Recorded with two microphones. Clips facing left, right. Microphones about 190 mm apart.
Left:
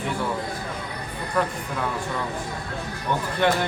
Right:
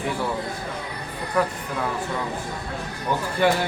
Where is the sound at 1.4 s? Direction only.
10° right (ahead or behind).